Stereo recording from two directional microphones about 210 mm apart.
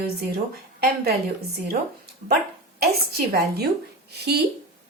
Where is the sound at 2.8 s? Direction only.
50° right (ahead or behind).